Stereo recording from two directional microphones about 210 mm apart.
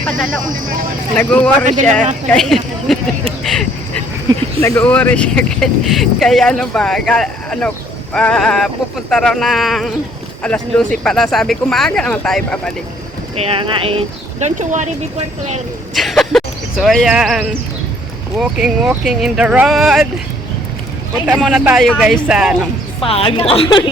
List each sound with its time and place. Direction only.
1.1 s speech: 5° left (ahead or behind)
1.6 s speech: 35° right (ahead or behind)
2.2 s speech: centre (ahead or behind)
4.6 s speech: 10° left (ahead or behind)
13.3 s speech: 30° right (ahead or behind)
16.0 s speech: centre (ahead or behind)
21.2 s speech: centre (ahead or behind)
23.0 s a woman's voice: 25° left (ahead or behind)